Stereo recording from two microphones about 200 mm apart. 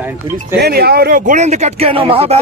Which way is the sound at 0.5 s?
55° right (ahead or behind).